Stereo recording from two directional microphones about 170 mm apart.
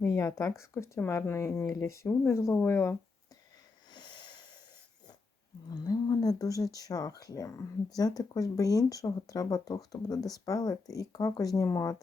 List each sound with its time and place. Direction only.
0.0 s speech: 20° left (ahead or behind)
3.9 s wheeze: 25° left (ahead or behind)
5.7 s speech: 20° left (ahead or behind)